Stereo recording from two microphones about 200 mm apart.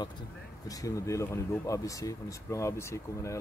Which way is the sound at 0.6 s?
15° left (ahead or behind).